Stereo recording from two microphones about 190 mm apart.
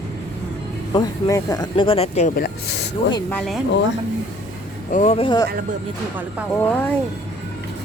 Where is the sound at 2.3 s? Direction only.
55° left (ahead or behind).